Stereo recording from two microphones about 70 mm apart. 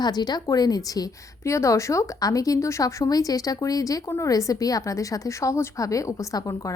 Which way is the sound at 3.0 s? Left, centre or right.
Left.